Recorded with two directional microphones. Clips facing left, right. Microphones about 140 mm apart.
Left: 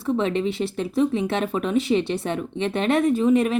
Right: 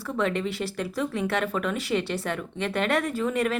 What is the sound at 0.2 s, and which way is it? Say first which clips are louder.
Speech: left 4 dB; 20° left (ahead or behind).